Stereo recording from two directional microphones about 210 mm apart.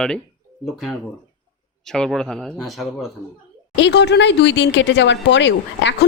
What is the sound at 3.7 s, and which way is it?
Speech, 55° left (ahead or behind).